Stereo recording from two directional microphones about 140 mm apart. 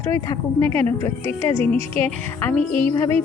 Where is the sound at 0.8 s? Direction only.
20° left (ahead or behind).